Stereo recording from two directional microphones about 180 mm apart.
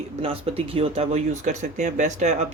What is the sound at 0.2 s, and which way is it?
Speech, 35° right (ahead or behind).